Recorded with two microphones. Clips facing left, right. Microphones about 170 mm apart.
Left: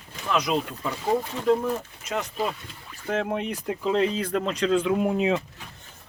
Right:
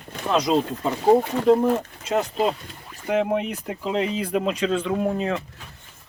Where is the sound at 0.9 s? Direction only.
45° right (ahead or behind).